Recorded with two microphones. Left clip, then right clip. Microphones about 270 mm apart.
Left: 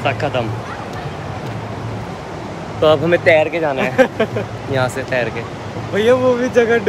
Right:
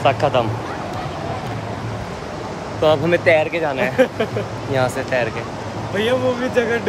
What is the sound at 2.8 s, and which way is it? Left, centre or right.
Speech, centre.